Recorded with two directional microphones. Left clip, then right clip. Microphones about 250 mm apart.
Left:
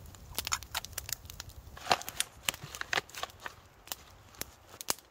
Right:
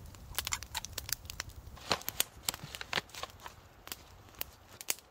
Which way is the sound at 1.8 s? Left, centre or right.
Centre.